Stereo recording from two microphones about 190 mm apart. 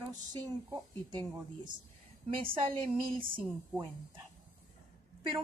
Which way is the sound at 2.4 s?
25° right (ahead or behind).